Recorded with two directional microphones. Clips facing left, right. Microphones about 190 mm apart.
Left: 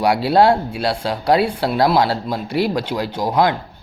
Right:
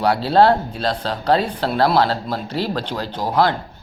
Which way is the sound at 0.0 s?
10° left (ahead or behind).